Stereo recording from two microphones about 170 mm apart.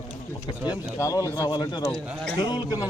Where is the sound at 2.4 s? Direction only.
25° left (ahead or behind).